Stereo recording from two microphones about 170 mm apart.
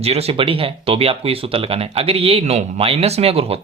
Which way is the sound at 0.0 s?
35° right (ahead or behind).